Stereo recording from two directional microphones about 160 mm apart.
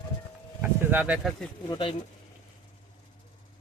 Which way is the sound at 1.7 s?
35° left (ahead or behind).